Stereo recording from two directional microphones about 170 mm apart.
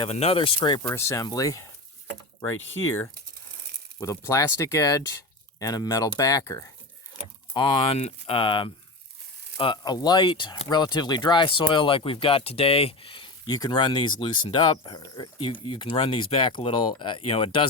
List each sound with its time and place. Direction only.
0.0 s speech: 35° left (ahead or behind)
0.9 s speech: 15° left (ahead or behind)
4.0 s speech: 15° left (ahead or behind)
7.5 s speech: 25° left (ahead or behind)